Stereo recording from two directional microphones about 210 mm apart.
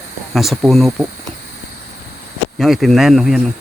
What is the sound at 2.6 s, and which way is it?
Speech, centre (ahead or behind).